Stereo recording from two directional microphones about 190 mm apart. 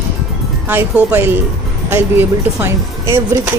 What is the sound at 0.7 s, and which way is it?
A woman's voice, 10° right (ahead or behind).